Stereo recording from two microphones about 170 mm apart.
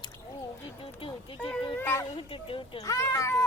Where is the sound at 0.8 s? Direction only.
30° left (ahead or behind).